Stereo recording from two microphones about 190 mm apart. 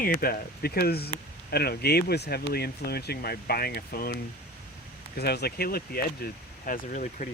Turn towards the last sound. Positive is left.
turn(degrees=40)  # may be behind; listen again after turning